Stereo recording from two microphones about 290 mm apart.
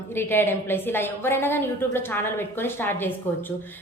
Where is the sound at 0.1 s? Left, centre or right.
Centre.